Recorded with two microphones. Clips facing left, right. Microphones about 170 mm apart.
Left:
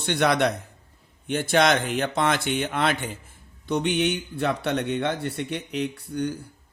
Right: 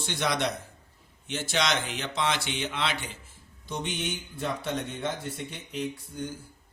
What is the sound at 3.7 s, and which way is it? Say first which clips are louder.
Speech: left 10 dB; 65° left (ahead or behind).